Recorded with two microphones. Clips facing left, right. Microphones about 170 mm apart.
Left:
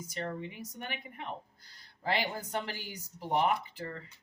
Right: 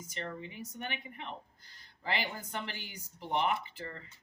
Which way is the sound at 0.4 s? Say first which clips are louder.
Even; 40° left (ahead or behind).